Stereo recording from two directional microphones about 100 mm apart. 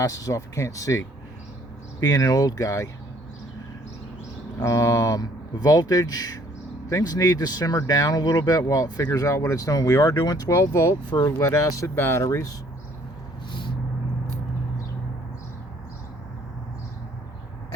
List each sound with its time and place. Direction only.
0.0 s speech: 35° left (ahead or behind)
4.6 s speech: 30° left (ahead or behind)